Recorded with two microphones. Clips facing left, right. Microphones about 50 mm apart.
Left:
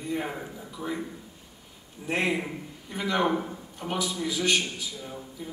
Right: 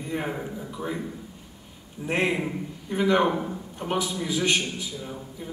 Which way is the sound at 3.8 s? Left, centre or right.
Centre.